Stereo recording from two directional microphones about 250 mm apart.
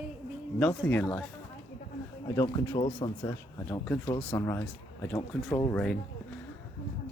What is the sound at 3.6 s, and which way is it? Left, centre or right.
A man's voice, centre.